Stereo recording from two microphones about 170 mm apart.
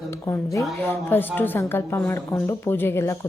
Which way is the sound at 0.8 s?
10° left (ahead or behind).